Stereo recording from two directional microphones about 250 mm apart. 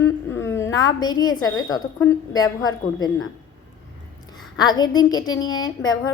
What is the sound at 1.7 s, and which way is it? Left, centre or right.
A woman's voice, centre.